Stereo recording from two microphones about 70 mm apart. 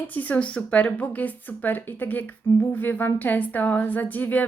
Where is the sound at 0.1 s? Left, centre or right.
Left.